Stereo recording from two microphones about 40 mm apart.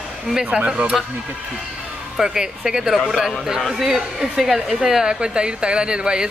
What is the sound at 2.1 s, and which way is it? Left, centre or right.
A woman's voice, centre.